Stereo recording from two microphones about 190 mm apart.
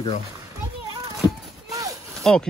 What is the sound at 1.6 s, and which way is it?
Clip-clop, 20° right (ahead or behind).